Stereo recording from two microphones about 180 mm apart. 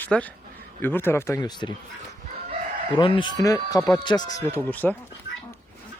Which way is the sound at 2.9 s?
30° left (ahead or behind).